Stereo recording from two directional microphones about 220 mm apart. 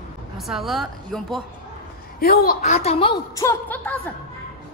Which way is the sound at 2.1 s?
40° left (ahead or behind).